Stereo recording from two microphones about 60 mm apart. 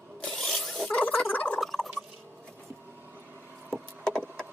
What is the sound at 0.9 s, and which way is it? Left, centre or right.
Gargling, left.